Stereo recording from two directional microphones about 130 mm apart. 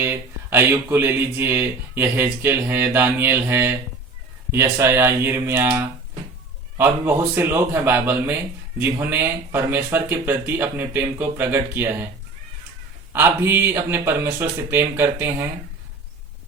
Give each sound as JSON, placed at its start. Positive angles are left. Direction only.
{"t": 0.0, "sound": "speech", "side_deg": -20}
{"t": 6.7, "sound": "speech", "side_deg": -15}
{"t": 13.1, "sound": "speech", "side_deg": -20}